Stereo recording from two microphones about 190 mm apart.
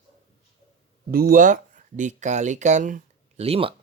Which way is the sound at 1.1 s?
50° right (ahead or behind).